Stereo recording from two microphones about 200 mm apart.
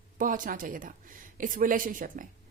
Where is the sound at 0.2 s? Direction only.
40° right (ahead or behind).